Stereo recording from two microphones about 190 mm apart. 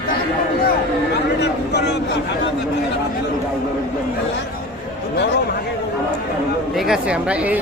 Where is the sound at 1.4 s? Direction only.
60° left (ahead or behind).